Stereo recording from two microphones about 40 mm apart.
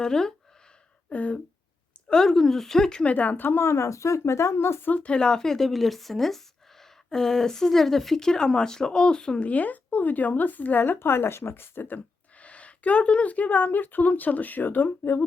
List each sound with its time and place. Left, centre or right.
0.0 s speech: centre
1.1 s speech: left
2.0 s speech: centre
3.0 s speech: left
3.4 s speech: left
4.2 s speech: left
5.0 s speech: left
9.4 s speech: left
11.0 s speech: left
12.4 s speech: left